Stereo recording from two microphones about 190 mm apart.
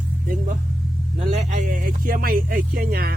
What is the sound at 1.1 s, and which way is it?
Speech, 35° right (ahead or behind).